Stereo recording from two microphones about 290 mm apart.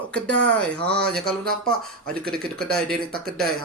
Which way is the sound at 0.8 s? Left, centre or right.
Right.